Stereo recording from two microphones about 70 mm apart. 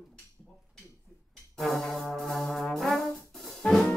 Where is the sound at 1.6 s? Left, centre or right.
Centre.